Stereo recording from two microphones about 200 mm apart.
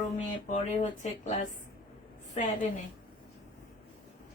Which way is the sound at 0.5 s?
35° left (ahead or behind).